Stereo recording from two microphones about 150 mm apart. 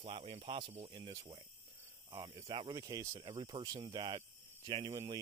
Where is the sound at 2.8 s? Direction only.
25° right (ahead or behind).